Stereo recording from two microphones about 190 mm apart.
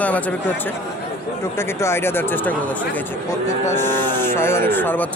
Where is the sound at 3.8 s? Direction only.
10° left (ahead or behind).